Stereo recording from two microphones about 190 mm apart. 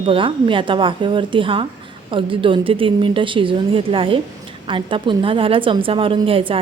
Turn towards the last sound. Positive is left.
turn(degrees=-30)  # may be behind; listen again after turning